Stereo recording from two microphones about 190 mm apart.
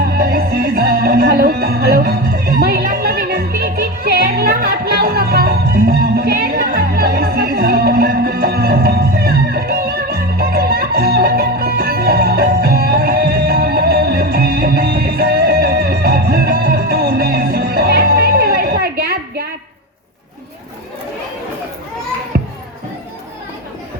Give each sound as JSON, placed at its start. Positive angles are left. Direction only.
{"t": 0.0, "sound": "music", "side_deg": -55}
{"t": 22.3, "sound": "music", "side_deg": -55}